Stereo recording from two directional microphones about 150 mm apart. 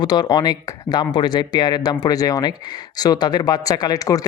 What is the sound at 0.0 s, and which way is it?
Speech, 25° left (ahead or behind).